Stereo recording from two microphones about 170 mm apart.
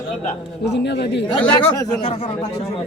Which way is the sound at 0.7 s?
90° left.